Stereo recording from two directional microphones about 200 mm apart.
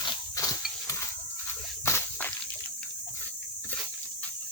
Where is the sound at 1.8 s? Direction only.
10° left (ahead or behind).